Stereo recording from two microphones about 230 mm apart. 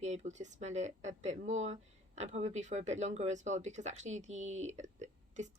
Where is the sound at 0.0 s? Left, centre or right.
Right.